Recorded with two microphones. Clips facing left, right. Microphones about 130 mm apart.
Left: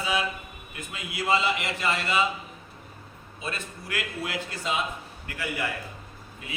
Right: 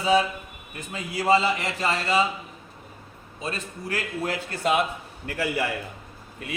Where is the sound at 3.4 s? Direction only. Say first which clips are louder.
Right 3 dB; 40° right (ahead or behind).